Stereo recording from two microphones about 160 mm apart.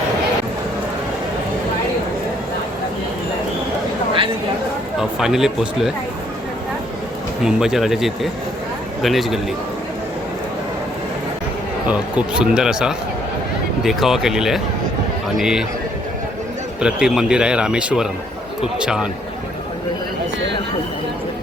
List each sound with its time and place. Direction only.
4.9 s speech: 5° right (ahead or behind)
7.4 s a man's voice: 5° right (ahead or behind)
11.9 s speech: 10° right (ahead or behind)
16.8 s speech: 5° right (ahead or behind)